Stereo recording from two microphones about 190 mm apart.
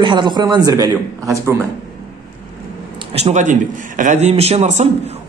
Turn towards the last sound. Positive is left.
turn(degrees=-35)  # may be behind; listen again after turning